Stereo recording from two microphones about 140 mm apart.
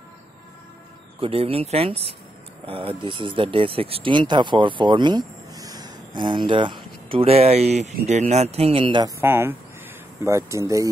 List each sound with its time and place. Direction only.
1.2 s speech: 45° right (ahead or behind)
9.2 s speech: 15° right (ahead or behind)